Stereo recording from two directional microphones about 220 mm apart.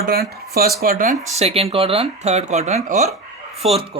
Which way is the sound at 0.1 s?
45° right (ahead or behind).